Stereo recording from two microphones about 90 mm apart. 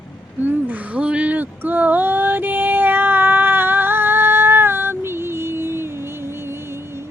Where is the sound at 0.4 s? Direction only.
15° right (ahead or behind).